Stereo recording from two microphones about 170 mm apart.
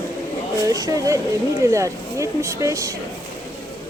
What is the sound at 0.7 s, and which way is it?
Speech, 20° right (ahead or behind).